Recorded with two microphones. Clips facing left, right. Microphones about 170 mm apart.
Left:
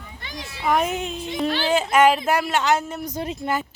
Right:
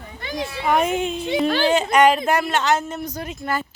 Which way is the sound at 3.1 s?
30° left (ahead or behind).